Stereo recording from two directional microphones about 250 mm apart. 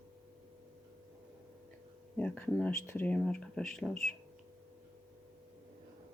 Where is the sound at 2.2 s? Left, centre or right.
Centre.